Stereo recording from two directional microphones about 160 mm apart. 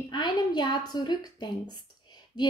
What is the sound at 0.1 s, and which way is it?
A woman's voice, 25° left (ahead or behind).